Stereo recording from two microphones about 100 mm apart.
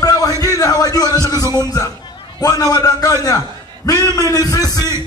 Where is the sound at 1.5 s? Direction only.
40° left (ahead or behind).